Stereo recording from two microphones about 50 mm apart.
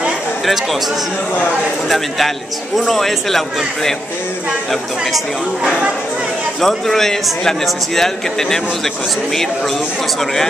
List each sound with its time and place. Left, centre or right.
1.9 s a man's voice: centre
6.6 s a man's voice: centre